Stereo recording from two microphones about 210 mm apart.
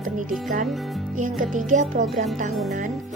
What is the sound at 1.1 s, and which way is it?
A woman's voice, 40° right (ahead or behind).